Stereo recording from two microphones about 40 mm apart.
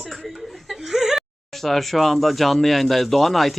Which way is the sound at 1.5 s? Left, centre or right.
Centre.